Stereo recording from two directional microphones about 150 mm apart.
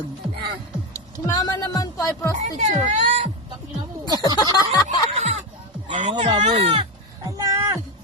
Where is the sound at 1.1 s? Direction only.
25° left (ahead or behind).